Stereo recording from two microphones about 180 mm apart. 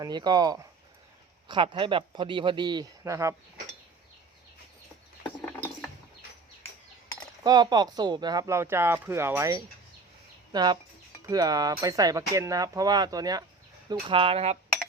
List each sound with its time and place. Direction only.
0.0 s speech: 25° right (ahead or behind)
5.2 s mechanisms: 10° left (ahead or behind)
7.4 s speech: 20° right (ahead or behind)
14.1 s speech: 30° right (ahead or behind)